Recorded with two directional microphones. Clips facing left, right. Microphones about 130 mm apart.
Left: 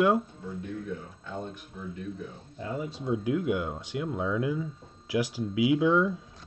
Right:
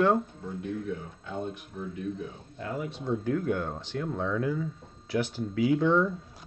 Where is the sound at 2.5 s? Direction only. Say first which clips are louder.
Even; 20° left (ahead or behind).